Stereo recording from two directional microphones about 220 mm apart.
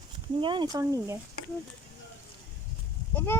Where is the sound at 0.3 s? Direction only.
20° right (ahead or behind).